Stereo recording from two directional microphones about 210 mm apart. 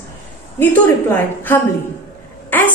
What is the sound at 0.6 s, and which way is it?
A woman's voice, 10° left (ahead or behind).